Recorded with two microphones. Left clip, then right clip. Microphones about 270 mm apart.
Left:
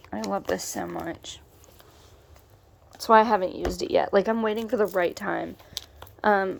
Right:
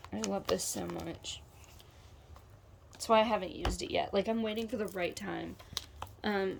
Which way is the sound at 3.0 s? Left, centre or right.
Centre.